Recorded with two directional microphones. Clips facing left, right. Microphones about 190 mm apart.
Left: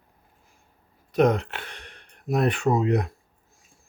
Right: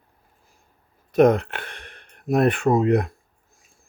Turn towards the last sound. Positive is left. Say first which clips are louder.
# right 4 dB
turn(degrees=-55)  # may be behind; listen again after turning